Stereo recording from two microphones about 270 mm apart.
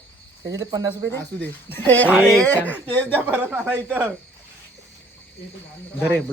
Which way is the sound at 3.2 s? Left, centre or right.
Centre.